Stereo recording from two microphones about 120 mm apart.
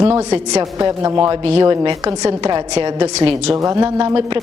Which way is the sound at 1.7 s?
30° right (ahead or behind).